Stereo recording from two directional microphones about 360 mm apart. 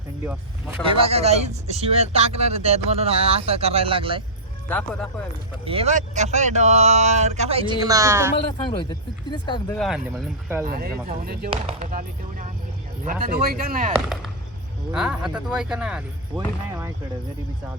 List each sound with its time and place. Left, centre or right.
0.3 s speech: centre
4.7 s speech: centre
5.6 s speech: centre
8.8 s speech: centre
9.7 s speech: centre
10.7 s speech: right
14.9 s speech: centre